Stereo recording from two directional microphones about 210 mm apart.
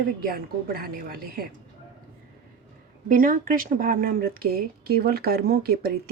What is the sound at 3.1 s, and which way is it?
Speech, 40° right (ahead or behind).